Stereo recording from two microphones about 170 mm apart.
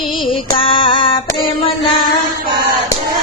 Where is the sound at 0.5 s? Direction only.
30° left (ahead or behind).